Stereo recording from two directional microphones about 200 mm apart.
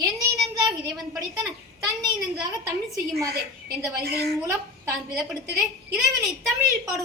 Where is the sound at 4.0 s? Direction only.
50° right (ahead or behind).